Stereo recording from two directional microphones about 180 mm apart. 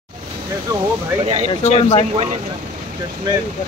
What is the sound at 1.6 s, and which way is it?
Speech, 35° left (ahead or behind).